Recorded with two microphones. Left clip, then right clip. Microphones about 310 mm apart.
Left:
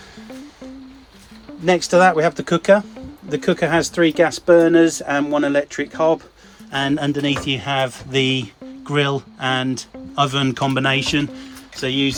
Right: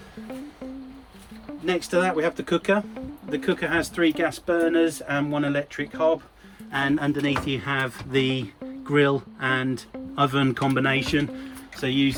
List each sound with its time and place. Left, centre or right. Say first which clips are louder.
1.6 s speech: left 10 dB; centre